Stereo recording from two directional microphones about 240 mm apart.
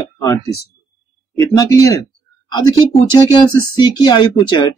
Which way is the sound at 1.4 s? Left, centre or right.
Centre.